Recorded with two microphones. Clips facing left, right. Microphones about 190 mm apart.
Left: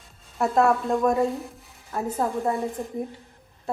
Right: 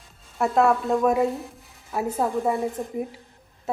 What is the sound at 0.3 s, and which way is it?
A woman's voice, centre (ahead or behind).